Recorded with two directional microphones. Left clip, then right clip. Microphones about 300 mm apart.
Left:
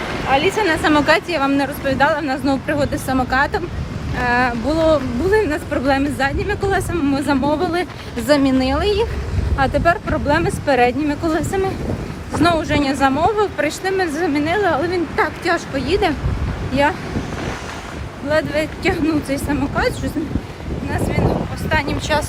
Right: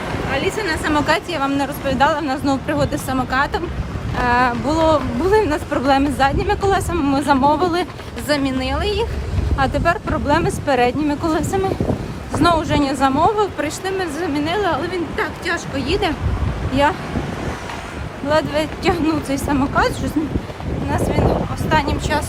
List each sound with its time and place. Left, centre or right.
0.5 s a woman's voice: centre
15.1 s speech: centre
15.7 s speech: centre
18.3 s speech: centre
21.7 s speech: centre